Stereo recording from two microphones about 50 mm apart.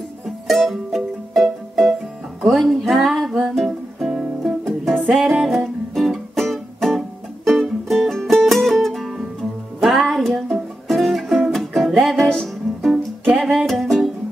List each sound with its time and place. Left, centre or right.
0.5 s music: centre
5.4 s music: centre
5.9 s music: centre
12.9 s music: centre
13.4 s music: centre